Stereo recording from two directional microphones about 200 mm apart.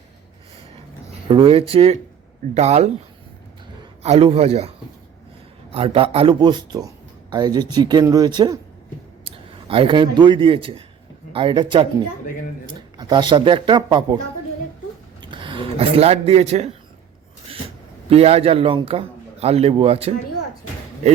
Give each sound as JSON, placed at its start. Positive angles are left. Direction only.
{"t": 1.3, "sound": "a man's voice", "side_deg": -25}
{"t": 4.0, "sound": "a man's voice", "side_deg": -30}
{"t": 5.7, "sound": "a man's voice", "side_deg": -30}
{"t": 13.0, "sound": "a man's voice", "side_deg": -20}
{"t": 15.2, "sound": "speech", "side_deg": -25}
{"t": 18.1, "sound": "a man's voice", "side_deg": -30}